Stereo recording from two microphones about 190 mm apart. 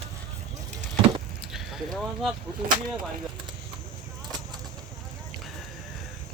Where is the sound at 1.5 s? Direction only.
Centre (ahead or behind).